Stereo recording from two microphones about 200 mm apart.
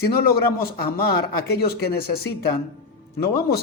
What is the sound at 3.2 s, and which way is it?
Speech, 50° left (ahead or behind).